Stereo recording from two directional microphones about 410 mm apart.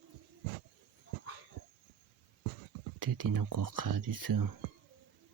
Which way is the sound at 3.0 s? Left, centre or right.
Right.